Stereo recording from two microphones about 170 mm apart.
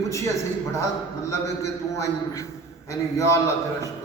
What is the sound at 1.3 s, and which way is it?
A man's voice, 15° left (ahead or behind).